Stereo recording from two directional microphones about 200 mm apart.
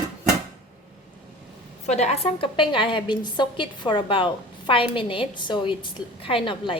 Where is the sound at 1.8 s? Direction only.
35° left (ahead or behind).